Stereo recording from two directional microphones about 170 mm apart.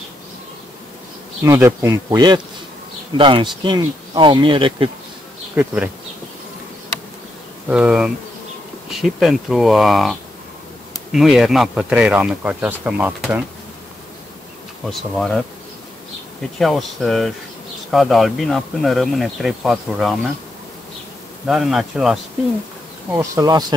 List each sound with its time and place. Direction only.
1.4 s speech: 15° right (ahead or behind); by 4.9 s 30° right (ahead or behind)
7.7 s speech: 5° right (ahead or behind)
14.9 s speech: centre (ahead or behind)
16.5 s speech: centre (ahead or behind)
21.5 s speech: centre (ahead or behind)
23.1 s speech: 20° right (ahead or behind)